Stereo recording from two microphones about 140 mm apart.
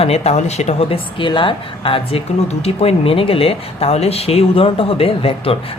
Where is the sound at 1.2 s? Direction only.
35° left (ahead or behind).